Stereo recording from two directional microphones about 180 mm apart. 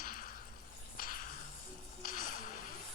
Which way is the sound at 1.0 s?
50° left (ahead or behind).